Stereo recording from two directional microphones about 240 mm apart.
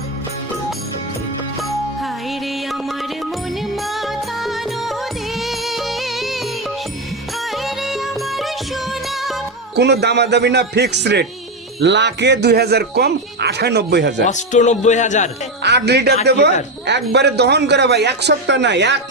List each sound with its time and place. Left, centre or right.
3.8 s music: centre
7.5 s music: centre
9.7 s speech: right
14.3 s speech: left
15.6 s speech: right